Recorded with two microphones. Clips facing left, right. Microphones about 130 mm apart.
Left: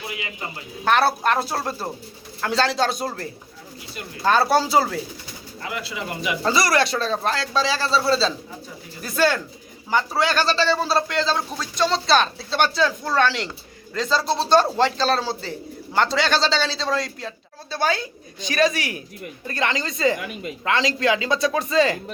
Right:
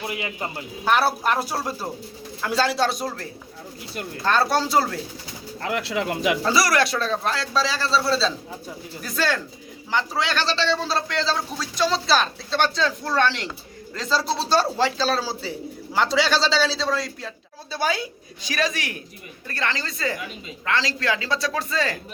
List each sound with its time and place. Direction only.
0.1 s a man's voice: 50° right (ahead or behind)
0.9 s a man's voice: 10° right (ahead or behind)
5.6 s speech: 70° right (ahead or behind)
6.4 s a man's voice: centre (ahead or behind)
10.2 s speech: 50° left (ahead or behind)
10.5 s a man's voice: 5° left (ahead or behind)
19.5 s a woman's voice: 15° left (ahead or behind)